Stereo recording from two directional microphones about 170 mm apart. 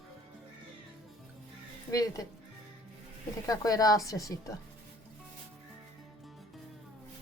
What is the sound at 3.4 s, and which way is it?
Speech, 20° left (ahead or behind).